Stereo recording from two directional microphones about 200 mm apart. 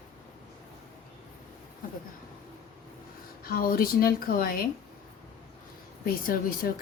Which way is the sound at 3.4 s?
50° left (ahead or behind).